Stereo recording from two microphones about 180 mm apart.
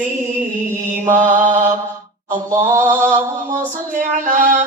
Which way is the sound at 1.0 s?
45° right (ahead or behind).